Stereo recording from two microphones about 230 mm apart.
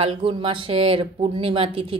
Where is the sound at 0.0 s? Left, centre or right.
Right.